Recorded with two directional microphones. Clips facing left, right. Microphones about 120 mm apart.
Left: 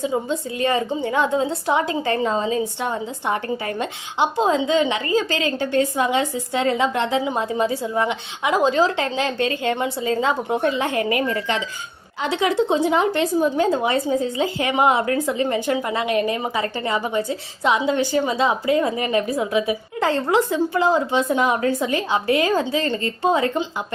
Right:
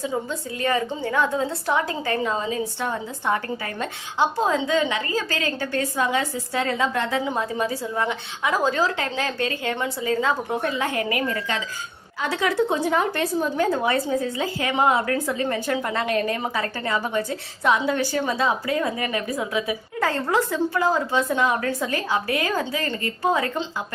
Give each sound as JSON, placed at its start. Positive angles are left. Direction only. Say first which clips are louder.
{"t": 0.0, "sound": "a woman's voice", "louder": "left 4 dB", "side_deg": 20}